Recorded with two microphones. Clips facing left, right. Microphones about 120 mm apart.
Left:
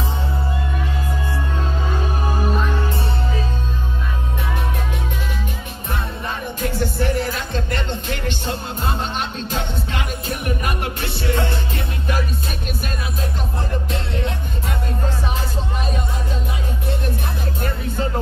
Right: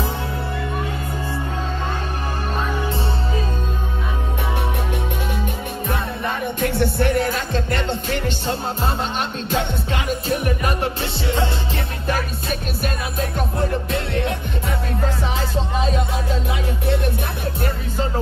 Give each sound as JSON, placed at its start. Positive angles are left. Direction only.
{"t": 6.2, "sound": "music", "side_deg": -60}
{"t": 10.2, "sound": "music", "side_deg": -40}
{"t": 12.1, "sound": "music", "side_deg": -45}